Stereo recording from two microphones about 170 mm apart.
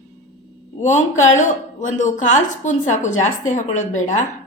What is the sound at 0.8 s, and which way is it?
A woman's voice, 45° left (ahead or behind).